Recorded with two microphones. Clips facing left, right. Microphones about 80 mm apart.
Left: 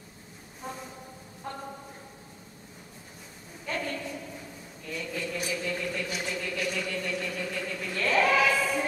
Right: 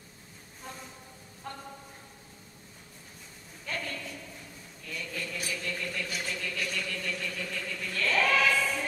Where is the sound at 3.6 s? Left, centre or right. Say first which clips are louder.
Left 4 dB; centre.